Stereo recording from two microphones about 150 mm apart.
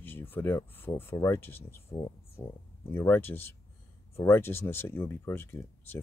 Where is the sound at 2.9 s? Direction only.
15° left (ahead or behind).